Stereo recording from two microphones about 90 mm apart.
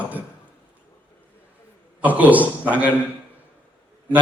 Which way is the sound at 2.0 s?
15° right (ahead or behind).